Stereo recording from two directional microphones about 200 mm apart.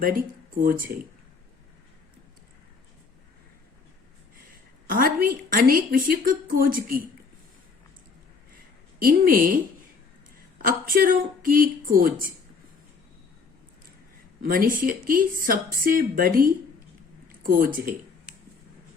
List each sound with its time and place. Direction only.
0.0 s a woman's voice: 45° right (ahead or behind)
4.9 s a woman's voice: 45° right (ahead or behind)
9.0 s a woman's voice: 45° right (ahead or behind)
10.7 s a woman's voice: 45° right (ahead or behind)
14.4 s a woman's voice: 45° right (ahead or behind)
17.2 s a sound: 45° right (ahead or behind)